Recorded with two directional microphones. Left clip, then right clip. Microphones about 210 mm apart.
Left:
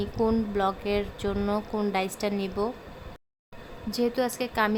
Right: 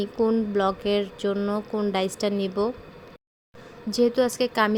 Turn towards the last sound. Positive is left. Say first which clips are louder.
# right 4 dB
turn(degrees=-15)  # may be behind; listen again after turning